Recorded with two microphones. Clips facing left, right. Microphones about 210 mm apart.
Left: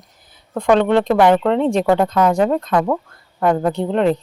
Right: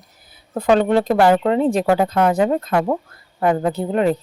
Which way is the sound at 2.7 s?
25° right (ahead or behind).